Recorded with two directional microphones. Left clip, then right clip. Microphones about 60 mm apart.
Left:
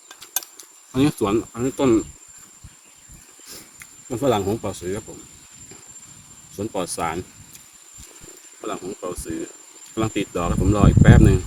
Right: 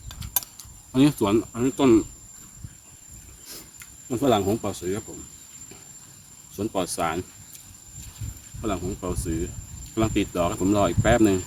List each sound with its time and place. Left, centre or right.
0.5 s cricket: right
3.4 s cricket: right
6.6 s speech: right
8.6 s speech: centre